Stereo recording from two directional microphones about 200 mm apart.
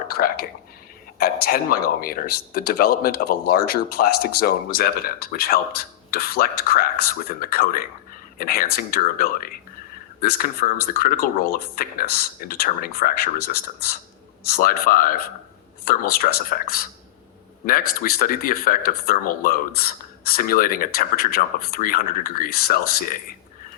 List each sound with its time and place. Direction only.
0.1 s speech: 50° left (ahead or behind)